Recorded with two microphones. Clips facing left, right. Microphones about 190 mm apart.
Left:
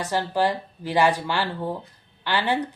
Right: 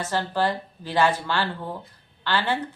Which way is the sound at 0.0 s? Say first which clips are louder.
Left 1 dB; 15° left (ahead or behind).